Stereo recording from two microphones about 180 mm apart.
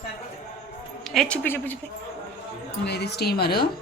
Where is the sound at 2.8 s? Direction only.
65° left (ahead or behind).